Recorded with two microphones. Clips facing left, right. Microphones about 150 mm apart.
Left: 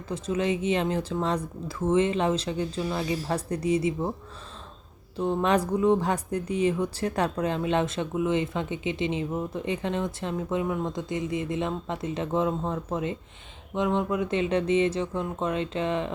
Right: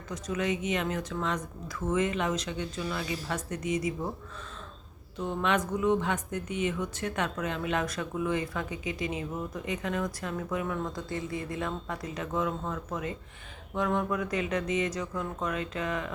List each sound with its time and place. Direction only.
0.1 s speech: 30° left (ahead or behind)
5.1 s speech: 30° left (ahead or behind)